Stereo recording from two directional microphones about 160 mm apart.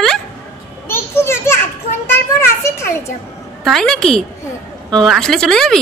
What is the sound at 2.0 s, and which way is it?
A child's voice, 15° left (ahead or behind).